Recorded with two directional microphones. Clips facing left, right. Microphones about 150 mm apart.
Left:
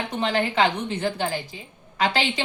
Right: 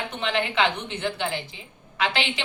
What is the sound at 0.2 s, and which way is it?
Speech, 40° left (ahead or behind).